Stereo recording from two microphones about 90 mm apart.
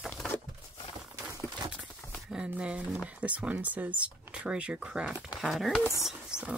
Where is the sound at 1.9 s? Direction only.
20° left (ahead or behind).